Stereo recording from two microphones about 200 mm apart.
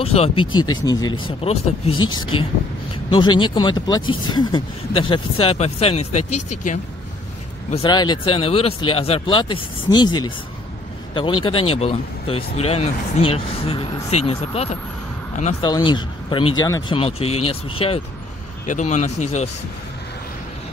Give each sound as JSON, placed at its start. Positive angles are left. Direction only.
{"t": 0.0, "sound": "speech", "side_deg": 30}
{"t": 1.9, "sound": "speech", "side_deg": 90}
{"t": 3.1, "sound": "speech", "side_deg": 25}
{"t": 7.7, "sound": "speech", "side_deg": 20}
{"t": 17.0, "sound": "speech", "side_deg": 30}